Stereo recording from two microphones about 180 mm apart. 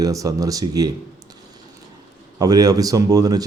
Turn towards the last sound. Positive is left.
turn(degrees=-20)  # may be behind; listen again after turning